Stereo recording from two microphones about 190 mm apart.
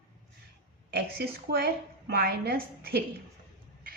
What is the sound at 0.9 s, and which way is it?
A woman's voice, 55° right (ahead or behind).